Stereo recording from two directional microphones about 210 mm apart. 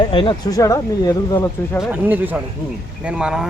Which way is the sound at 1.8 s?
10° right (ahead or behind).